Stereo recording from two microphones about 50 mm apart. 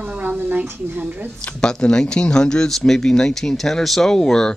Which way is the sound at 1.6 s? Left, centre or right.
Centre.